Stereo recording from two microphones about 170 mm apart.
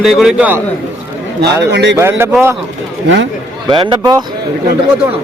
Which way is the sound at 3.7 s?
25° right (ahead or behind).